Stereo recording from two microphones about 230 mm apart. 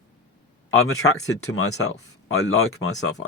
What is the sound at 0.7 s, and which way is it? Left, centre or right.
Speech, left.